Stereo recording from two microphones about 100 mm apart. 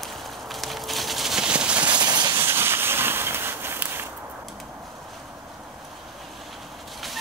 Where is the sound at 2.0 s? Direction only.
45° right (ahead or behind).